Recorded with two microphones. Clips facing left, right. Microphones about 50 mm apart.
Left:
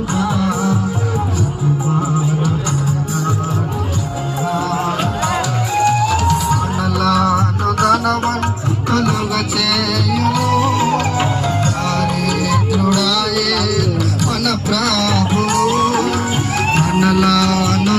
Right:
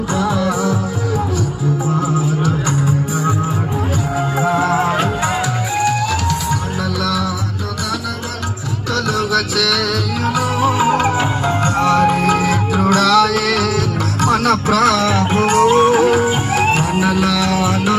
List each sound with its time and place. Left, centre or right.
4.4 s music: right
5.7 s music: centre
7.0 s music: left
7.8 s music: left
8.9 s music: left
9.3 s music: centre
10.2 s music: centre
11.4 s music: right; by 17.9 s centre